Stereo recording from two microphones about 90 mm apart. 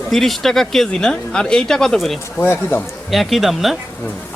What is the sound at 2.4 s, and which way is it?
Speech, 25° left (ahead or behind).